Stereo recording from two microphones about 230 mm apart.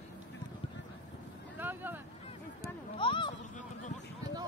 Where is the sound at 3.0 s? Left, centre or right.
Left.